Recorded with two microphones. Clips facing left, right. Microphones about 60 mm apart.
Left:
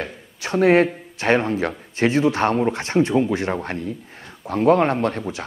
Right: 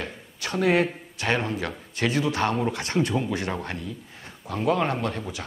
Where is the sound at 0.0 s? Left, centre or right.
Left.